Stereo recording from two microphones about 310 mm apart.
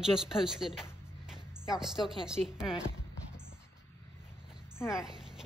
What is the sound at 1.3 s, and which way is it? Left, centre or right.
Music, centre.